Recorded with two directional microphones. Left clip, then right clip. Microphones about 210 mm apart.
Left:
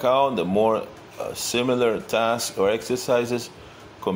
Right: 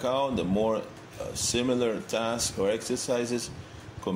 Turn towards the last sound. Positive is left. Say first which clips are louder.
# left 6 dB
turn(degrees=15)  # may be behind; listen again after turning